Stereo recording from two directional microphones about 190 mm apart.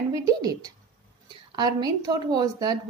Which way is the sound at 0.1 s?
20° right (ahead or behind).